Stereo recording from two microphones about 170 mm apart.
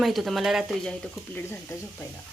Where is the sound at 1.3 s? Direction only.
10° left (ahead or behind).